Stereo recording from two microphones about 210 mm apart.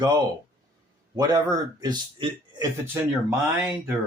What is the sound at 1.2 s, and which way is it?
Speech, 20° right (ahead or behind).